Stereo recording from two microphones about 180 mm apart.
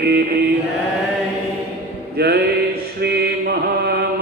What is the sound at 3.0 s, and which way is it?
Mantra, 65° right (ahead or behind).